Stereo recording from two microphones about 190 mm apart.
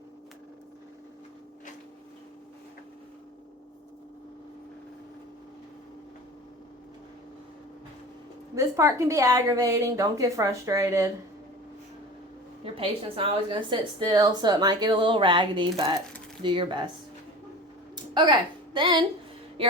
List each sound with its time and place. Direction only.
8.5 s a woman's voice: 15° right (ahead or behind)
12.6 s a woman's voice: 30° right (ahead or behind)
17.9 s a sound: 20° right (ahead or behind)
19.6 s a woman's voice: 30° right (ahead or behind)